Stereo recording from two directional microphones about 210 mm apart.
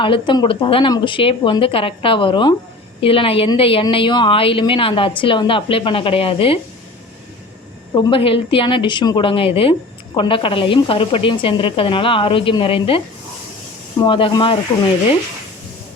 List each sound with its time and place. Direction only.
0.0 s a woman's voice: 25° left (ahead or behind)
7.9 s a woman's voice: 25° left (ahead or behind)
14.0 s a woman's voice: 25° left (ahead or behind)